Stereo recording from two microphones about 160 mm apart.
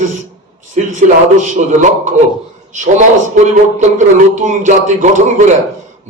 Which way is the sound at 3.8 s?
50° right (ahead or behind).